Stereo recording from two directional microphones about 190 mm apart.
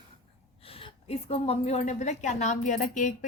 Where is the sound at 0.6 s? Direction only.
30° left (ahead or behind).